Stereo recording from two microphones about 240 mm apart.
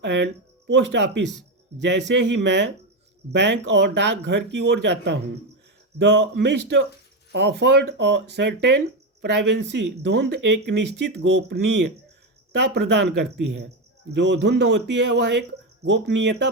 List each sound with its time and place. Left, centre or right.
0.0 s speech: right